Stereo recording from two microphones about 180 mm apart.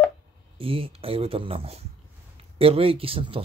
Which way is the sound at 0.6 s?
30° right (ahead or behind).